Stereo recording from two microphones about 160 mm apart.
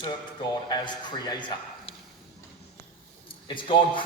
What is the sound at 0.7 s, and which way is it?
A man's voice, 25° left (ahead or behind).